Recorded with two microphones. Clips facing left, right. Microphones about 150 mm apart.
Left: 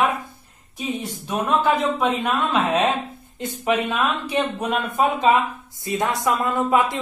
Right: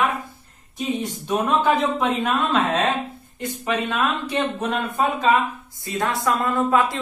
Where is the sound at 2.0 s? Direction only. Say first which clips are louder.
Even; 10° left (ahead or behind).